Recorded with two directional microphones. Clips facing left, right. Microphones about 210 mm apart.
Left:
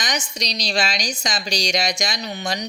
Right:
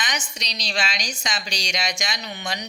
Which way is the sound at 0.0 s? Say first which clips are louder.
Left 4 dB; 40° left (ahead or behind).